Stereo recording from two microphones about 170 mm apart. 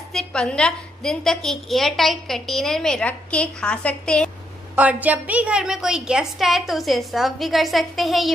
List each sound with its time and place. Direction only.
0.1 s a woman's voice: 5° left (ahead or behind)
4.7 s a woman's voice: 10° right (ahead or behind)